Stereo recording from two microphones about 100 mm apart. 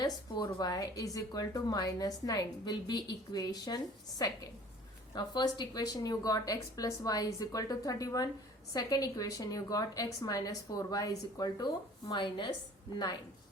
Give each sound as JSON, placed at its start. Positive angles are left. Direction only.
{"t": 0.0, "sound": "a woman's voice", "side_deg": 40}
{"t": 5.1, "sound": "a woman's voice", "side_deg": 45}